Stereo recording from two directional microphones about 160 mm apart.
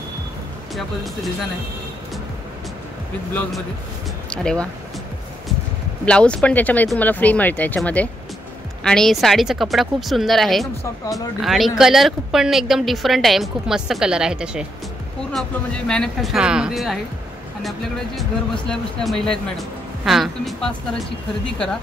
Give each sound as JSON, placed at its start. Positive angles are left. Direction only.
{"t": 0.7, "sound": "a woman's voice", "side_deg": 0}
{"t": 4.3, "sound": "speech", "side_deg": 5}
{"t": 6.0, "sound": "a woman's voice", "side_deg": 5}
{"t": 10.8, "sound": "speech", "side_deg": 20}
{"t": 11.4, "sound": "a woman's voice", "side_deg": 0}